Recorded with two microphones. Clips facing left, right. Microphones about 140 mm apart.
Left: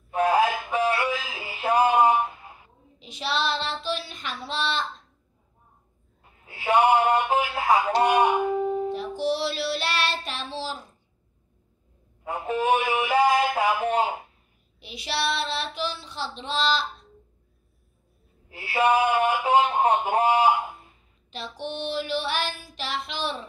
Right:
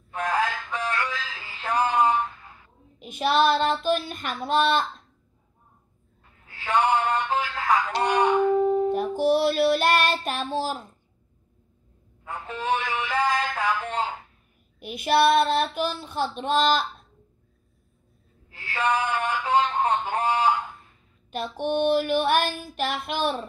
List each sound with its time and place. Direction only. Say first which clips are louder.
0.1 s synthetic singing: left 5 dB; 10° left (ahead or behind)
3.0 s child singing: right 7 dB; 50° right (ahead or behind)
6.2 s a sound: left 6 dB; 15° left (ahead or behind)
8.8 s child singing: right 4 dB; 50° right (ahead or behind)
12.3 s a man's voice: left 4 dB; 15° left (ahead or behind)
14.8 s female singing: right 9 dB; 50° right (ahead or behind)
18.5 s a man's voice: left 4 dB; 10° left (ahead or behind)
21.3 s female singing: right 7 dB; 50° right (ahead or behind)